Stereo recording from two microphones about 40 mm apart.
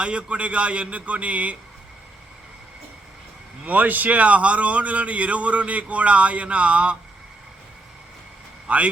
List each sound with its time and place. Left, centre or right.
0.0 s a man's voice: right
3.7 s a man's voice: right
8.6 s speech: right